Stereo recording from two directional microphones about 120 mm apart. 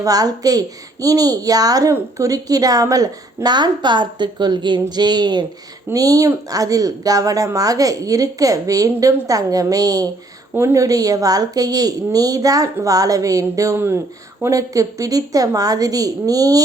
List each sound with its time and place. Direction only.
0.0 s a woman's voice: 30° right (ahead or behind)
10.5 s a woman's voice: 20° right (ahead or behind)